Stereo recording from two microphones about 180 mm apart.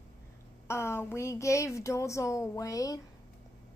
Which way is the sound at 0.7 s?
15° left (ahead or behind).